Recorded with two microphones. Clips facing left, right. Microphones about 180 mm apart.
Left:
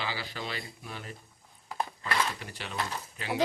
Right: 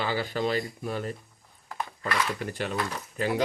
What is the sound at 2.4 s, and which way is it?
Speech, 50° right (ahead or behind).